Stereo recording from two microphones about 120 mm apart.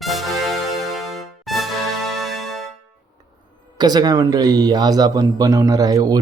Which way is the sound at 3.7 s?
35° right (ahead or behind).